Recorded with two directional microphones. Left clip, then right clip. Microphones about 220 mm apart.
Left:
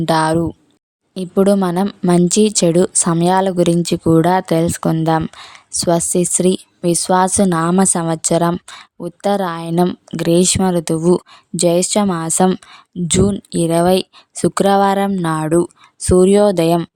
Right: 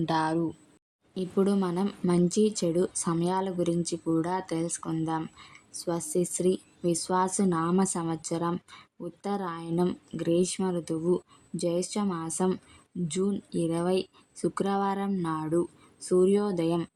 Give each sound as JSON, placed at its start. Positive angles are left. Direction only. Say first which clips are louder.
{"t": 0.0, "sound": "speech", "louder": "left 12 dB", "side_deg": 40}